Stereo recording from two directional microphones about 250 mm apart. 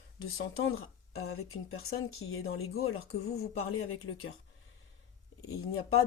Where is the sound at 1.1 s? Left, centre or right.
Left.